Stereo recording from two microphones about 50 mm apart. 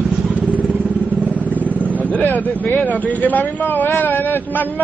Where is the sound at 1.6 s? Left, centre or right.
Left.